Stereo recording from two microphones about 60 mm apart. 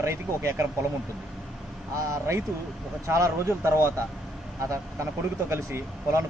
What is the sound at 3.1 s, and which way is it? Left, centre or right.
A man's voice, right.